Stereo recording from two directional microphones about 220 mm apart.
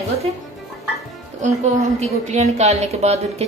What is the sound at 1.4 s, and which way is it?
A woman's voice, 30° right (ahead or behind).